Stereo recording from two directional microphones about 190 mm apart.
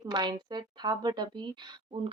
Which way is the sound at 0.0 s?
20° right (ahead or behind).